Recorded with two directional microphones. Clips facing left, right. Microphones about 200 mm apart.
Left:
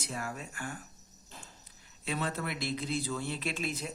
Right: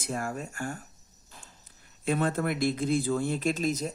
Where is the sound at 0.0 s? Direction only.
45° right (ahead or behind).